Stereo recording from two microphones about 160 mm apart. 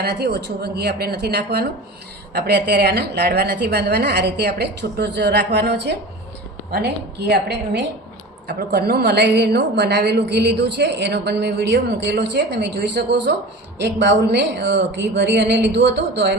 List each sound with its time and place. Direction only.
0.0 s a woman's voice: 90° right